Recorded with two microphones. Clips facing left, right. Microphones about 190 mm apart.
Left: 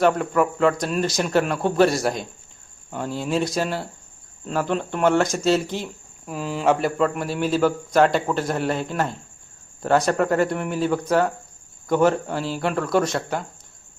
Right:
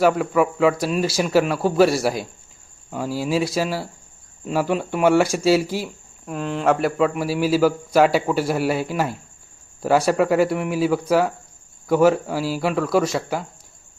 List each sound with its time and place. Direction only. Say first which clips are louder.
0.0 s a man's voice: right 1 dB; 5° right (ahead or behind)